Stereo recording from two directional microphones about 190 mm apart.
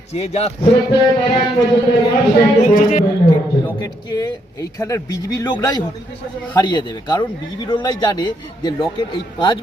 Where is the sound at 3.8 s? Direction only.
20° left (ahead or behind).